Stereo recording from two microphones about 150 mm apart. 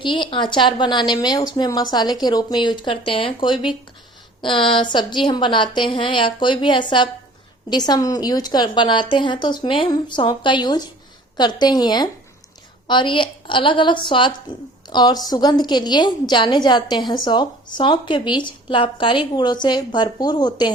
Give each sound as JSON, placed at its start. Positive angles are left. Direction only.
{"t": 0.0, "sound": "a woman's voice", "side_deg": 35}